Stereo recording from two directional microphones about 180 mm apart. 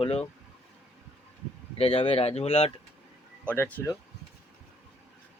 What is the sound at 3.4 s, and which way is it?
Speech, 10° left (ahead or behind).